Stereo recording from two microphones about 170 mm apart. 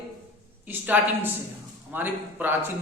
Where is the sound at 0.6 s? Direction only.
10° right (ahead or behind).